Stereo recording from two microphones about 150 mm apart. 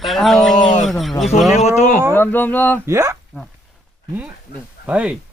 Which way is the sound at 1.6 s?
50° left (ahead or behind).